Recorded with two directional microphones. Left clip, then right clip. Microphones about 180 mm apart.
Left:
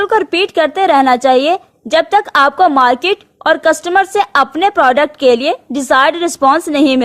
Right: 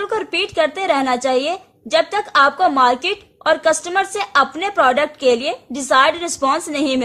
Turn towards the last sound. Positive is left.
turn(degrees=40)  # may be behind; listen again after turning